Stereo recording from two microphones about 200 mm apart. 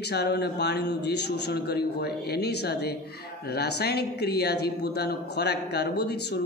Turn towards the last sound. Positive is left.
turn(degrees=55)  # may be behind; listen again after turning